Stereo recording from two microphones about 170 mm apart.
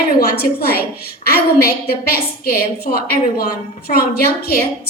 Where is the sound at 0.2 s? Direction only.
65° left (ahead or behind).